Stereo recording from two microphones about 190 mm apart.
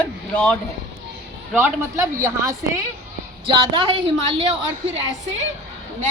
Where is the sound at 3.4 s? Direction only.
25° right (ahead or behind).